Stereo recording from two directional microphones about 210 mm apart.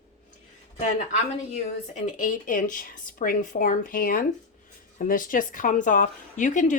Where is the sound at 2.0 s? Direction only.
40° left (ahead or behind).